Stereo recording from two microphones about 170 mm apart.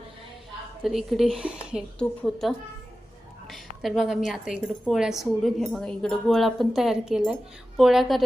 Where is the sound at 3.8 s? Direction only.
Centre (ahead or behind).